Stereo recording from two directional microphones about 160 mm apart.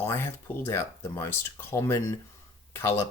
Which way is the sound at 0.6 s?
15° left (ahead or behind).